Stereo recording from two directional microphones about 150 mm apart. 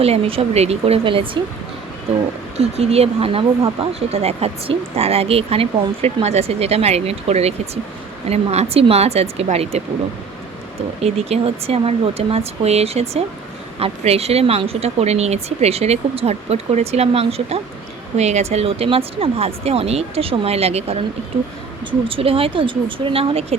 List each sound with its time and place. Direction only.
0.0 s speech: 40° right (ahead or behind)
2.6 s speech: 45° right (ahead or behind)
11.0 s speech: 45° right (ahead or behind)